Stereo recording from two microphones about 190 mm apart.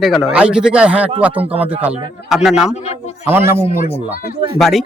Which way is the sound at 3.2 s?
10° right (ahead or behind).